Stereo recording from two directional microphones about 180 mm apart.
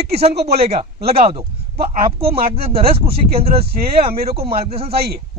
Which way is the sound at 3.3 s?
35° right (ahead or behind).